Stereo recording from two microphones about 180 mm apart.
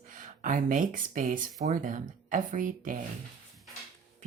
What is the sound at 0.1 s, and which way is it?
Speech, 45° right (ahead or behind).